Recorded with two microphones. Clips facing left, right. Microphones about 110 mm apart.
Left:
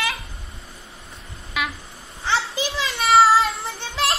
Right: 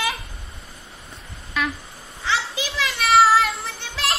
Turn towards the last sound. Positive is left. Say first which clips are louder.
# left 3 dB
turn(degrees=30)  # may be behind; listen again after turning